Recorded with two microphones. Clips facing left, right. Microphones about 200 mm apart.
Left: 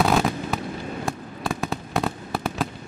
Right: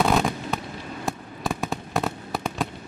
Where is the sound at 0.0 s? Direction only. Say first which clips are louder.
Left 1 dB; centre (ahead or behind).